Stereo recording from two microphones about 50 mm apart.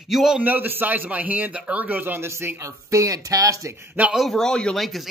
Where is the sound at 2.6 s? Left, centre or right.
Right.